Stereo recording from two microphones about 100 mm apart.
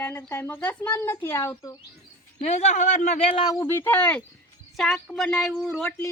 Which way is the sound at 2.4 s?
90° left.